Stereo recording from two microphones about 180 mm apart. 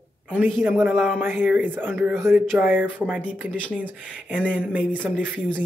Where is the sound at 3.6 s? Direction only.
10° left (ahead or behind).